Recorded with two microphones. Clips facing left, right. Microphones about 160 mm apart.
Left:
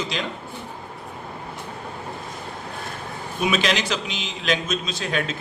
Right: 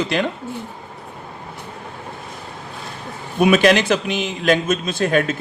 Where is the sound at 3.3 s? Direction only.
55° right (ahead or behind).